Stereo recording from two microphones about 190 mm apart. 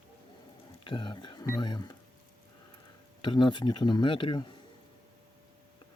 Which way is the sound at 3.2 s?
25° left (ahead or behind).